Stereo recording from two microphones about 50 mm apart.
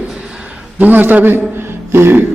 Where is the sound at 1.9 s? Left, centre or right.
Right.